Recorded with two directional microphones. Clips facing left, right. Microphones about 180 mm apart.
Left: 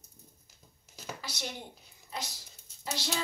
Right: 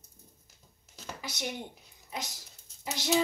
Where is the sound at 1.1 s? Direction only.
20° right (ahead or behind).